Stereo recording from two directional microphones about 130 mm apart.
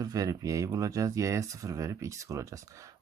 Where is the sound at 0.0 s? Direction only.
30° right (ahead or behind).